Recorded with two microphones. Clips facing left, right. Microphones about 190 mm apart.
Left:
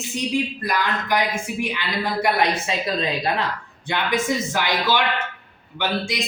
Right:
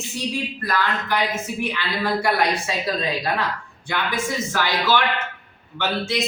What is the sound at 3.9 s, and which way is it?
A woman's voice, 20° left (ahead or behind).